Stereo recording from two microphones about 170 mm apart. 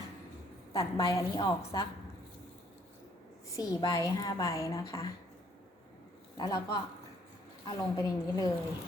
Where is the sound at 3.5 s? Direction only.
20° left (ahead or behind).